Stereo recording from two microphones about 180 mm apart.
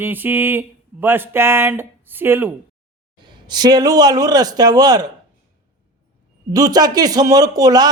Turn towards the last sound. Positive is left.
turn(degrees=-20)  # may be behind; listen again after turning